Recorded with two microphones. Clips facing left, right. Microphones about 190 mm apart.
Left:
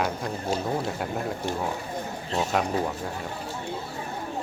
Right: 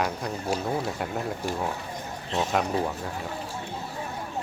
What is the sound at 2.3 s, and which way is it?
Speech, centre (ahead or behind).